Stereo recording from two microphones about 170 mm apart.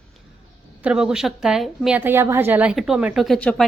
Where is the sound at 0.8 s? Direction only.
5° right (ahead or behind).